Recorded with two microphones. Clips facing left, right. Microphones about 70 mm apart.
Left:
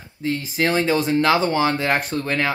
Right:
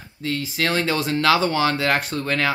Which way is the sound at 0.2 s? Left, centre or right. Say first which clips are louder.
Left 2 dB; centre.